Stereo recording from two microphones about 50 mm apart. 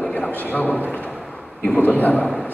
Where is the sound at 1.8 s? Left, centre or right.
Left.